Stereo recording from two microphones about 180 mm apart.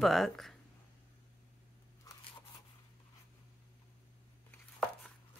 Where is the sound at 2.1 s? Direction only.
20° left (ahead or behind).